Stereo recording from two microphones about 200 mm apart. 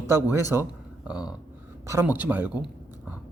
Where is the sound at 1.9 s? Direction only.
10° right (ahead or behind).